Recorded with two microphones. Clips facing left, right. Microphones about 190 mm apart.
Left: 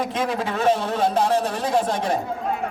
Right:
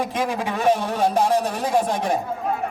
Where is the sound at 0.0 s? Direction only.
10° right (ahead or behind).